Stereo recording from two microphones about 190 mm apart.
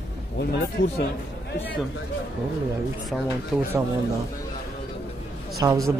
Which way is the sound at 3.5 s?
Centre (ahead or behind).